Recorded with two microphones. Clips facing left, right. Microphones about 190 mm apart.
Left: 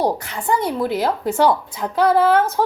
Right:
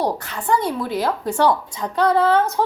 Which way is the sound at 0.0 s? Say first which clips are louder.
Left 2 dB; 10° left (ahead or behind).